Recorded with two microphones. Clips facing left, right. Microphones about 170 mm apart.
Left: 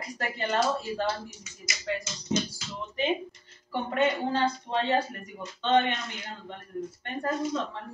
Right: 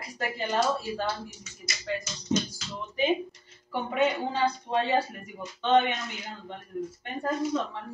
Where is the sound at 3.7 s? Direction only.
5° right (ahead or behind).